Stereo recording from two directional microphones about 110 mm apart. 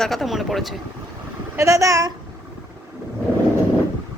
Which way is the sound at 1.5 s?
30° right (ahead or behind).